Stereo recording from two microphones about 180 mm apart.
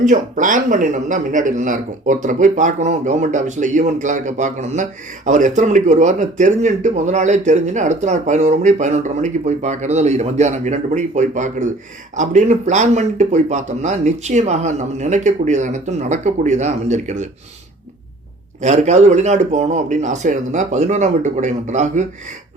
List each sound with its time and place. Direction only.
0.0 s speech: 45° right (ahead or behind)
18.6 s speech: 40° right (ahead or behind)